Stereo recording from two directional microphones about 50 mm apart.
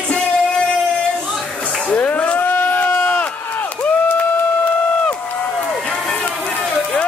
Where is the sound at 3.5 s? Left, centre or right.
Left.